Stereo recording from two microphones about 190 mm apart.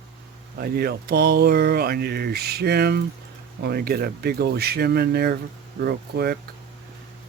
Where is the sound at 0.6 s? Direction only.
55° right (ahead or behind).